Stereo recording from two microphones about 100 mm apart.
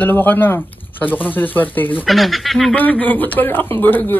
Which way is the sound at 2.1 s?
Centre (ahead or behind).